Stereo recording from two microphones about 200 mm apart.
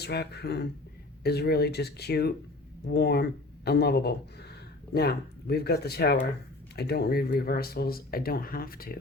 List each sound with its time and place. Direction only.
0.0 s speech: 55° left (ahead or behind)